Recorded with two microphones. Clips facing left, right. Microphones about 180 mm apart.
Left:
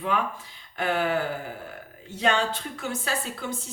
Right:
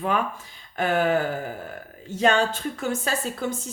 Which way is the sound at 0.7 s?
45° right (ahead or behind).